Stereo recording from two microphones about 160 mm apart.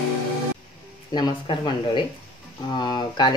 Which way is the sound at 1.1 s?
30° left (ahead or behind).